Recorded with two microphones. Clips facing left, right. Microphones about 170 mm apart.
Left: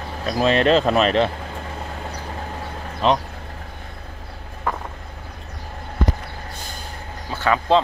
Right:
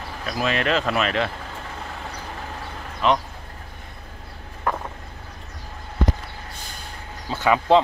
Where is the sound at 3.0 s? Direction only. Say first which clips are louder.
Left 2 dB; 30° left (ahead or behind).